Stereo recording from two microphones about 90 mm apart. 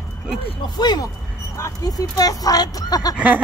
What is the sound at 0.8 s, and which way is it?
Speech, 55° left (ahead or behind).